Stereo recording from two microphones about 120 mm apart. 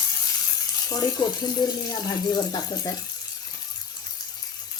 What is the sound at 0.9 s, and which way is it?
Speech, 30° left (ahead or behind).